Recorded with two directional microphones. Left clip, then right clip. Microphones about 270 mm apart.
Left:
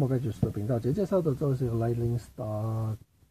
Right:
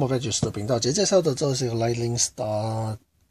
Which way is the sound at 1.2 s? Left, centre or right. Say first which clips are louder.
Right 6 dB; centre.